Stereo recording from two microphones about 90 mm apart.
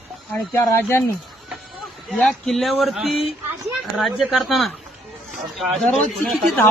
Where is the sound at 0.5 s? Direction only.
30° left (ahead or behind).